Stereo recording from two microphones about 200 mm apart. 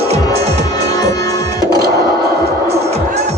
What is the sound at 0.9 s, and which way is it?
Music, 15° left (ahead or behind).